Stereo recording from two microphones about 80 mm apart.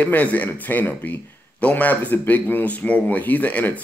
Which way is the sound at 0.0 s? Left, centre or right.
Centre.